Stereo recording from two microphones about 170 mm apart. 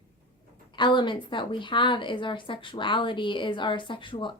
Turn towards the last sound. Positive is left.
turn(degrees=30)  # may be behind; listen again after turning